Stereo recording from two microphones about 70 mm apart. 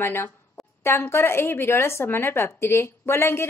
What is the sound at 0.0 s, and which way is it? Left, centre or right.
A woman's voice, left.